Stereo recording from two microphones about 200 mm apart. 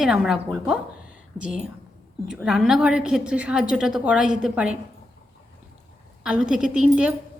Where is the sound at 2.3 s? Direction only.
5° right (ahead or behind).